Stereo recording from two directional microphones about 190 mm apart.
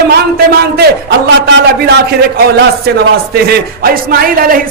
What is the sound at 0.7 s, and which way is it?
A man's voice, 60° right (ahead or behind).